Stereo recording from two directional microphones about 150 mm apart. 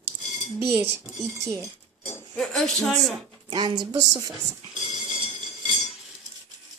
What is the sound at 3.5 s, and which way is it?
Speech, 30° right (ahead or behind).